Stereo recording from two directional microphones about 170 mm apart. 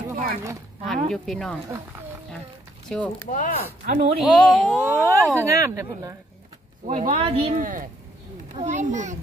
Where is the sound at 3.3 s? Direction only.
50° left (ahead or behind).